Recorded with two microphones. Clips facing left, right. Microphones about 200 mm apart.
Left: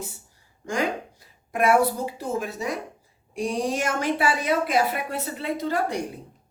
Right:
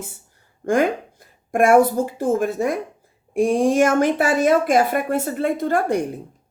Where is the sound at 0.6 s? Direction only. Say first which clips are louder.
Right 8 dB; 55° right (ahead or behind).